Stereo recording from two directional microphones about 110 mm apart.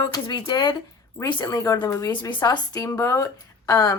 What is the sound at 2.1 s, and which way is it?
Speech, 45° left (ahead or behind).